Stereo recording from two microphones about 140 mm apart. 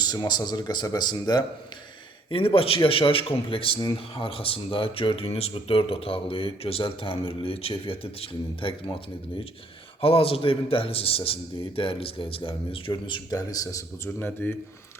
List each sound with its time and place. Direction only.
0.0 s speech: 30° left (ahead or behind)
2.3 s a man's voice: 40° left (ahead or behind)
10.0 s a man's voice: 45° left (ahead or behind); by 14.5 s 15° left (ahead or behind)